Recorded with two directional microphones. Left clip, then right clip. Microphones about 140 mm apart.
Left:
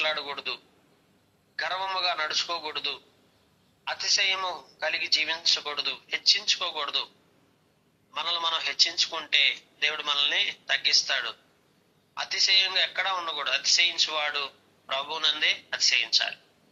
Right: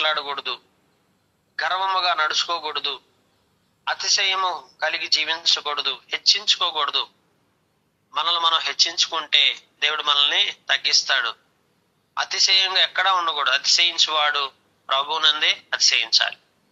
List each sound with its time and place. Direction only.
0.0 s a man's voice: 35° right (ahead or behind)
8.1 s a man's voice: 40° right (ahead or behind)